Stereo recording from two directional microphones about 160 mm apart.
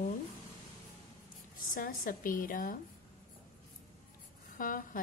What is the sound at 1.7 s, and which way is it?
A woman's voice, 60° left (ahead or behind).